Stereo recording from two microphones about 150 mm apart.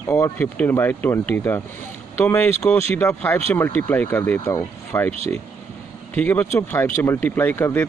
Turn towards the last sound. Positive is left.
turn(degrees=15)  # may be behind; listen again after turning